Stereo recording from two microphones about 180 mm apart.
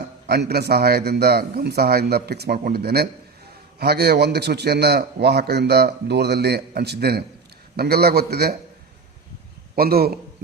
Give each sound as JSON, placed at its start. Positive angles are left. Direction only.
{"t": 0.3, "sound": "a man's voice", "side_deg": -60}
{"t": 9.7, "sound": "a man's voice", "side_deg": -55}